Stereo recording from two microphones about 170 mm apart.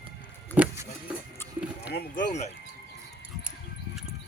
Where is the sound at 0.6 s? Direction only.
10° right (ahead or behind).